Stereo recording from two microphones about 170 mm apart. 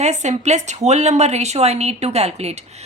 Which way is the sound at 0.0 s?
40° right (ahead or behind).